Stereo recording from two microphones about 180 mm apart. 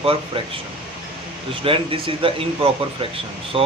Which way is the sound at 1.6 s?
30° right (ahead or behind).